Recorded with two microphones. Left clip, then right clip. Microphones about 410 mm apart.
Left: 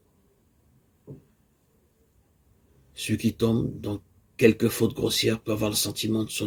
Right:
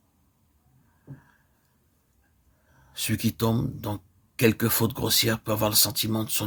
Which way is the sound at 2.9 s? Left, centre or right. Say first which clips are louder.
Left 1 dB; right.